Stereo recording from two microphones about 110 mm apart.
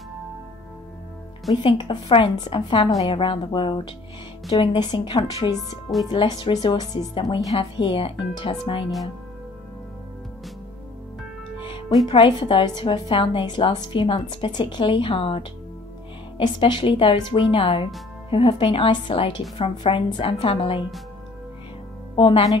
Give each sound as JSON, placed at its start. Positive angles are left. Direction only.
{"t": 1.5, "sound": "a woman's voice", "side_deg": 45}
{"t": 12.1, "sound": "a woman's voice", "side_deg": 50}
{"t": 22.1, "sound": "speech", "side_deg": 50}